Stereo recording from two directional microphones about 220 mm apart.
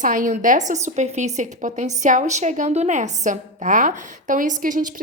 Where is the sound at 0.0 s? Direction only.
35° right (ahead or behind).